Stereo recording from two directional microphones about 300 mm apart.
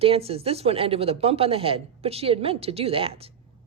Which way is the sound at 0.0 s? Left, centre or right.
Centre.